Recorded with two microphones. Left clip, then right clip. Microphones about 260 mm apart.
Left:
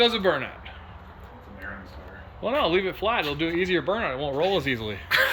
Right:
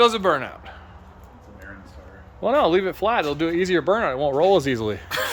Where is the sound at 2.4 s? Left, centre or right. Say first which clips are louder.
Right 5 dB; right.